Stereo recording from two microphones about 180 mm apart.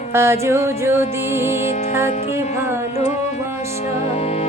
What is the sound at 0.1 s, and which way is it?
Music, 15° right (ahead or behind).